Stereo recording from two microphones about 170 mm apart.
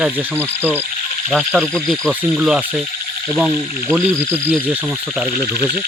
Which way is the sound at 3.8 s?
10° right (ahead or behind).